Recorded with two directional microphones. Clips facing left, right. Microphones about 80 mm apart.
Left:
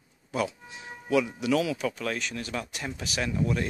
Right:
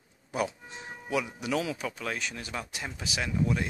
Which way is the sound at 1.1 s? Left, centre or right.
Centre.